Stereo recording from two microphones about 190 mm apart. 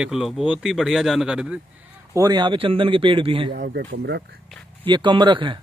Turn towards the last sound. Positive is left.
turn(degrees=-25)  # may be behind; listen again after turning